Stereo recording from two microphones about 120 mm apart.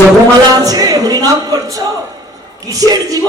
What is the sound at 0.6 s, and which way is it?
A man's voice, 30° right (ahead or behind).